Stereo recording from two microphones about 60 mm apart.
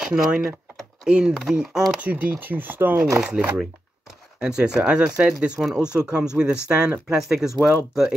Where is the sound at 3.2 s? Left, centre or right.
Centre.